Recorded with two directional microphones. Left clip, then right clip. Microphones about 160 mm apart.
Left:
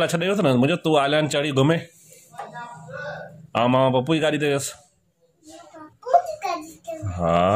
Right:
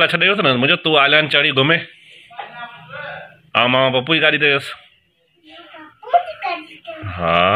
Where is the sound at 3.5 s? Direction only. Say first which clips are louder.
Right 4 dB; 25° left (ahead or behind).